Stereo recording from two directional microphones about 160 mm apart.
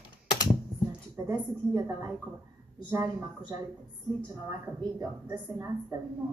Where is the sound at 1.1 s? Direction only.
20° right (ahead or behind).